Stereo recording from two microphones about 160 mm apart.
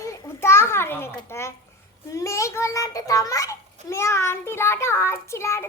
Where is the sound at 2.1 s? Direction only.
20° left (ahead or behind).